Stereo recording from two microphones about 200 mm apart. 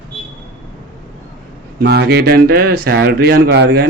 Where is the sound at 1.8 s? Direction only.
55° right (ahead or behind).